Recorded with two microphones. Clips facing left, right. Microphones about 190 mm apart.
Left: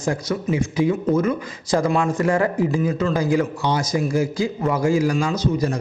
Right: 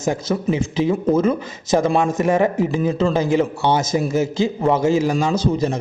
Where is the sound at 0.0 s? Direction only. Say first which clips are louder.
Right 3 dB; 25° right (ahead or behind).